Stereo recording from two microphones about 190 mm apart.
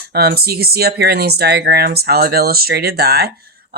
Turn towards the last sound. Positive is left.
turn(degrees=-55)  # may be behind; listen again after turning